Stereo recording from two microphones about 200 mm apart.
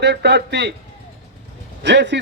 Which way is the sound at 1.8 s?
60° right (ahead or behind).